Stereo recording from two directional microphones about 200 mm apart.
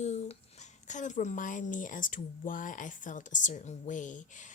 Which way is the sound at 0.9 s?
40° left (ahead or behind).